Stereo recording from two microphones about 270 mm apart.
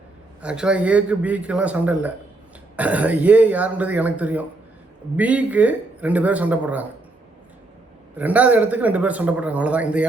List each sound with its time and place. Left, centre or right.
0.4 s speech: centre
8.1 s speech: centre